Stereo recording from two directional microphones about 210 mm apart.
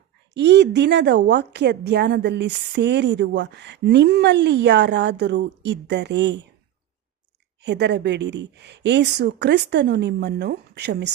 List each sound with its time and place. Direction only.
0.3 s a woman's voice: 55° right (ahead or behind)
7.6 s a woman's voice: 55° right (ahead or behind)